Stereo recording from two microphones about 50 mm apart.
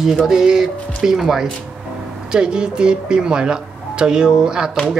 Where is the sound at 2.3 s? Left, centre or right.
Centre.